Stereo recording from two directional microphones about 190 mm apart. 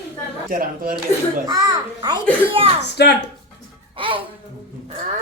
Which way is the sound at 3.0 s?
60° left (ahead or behind).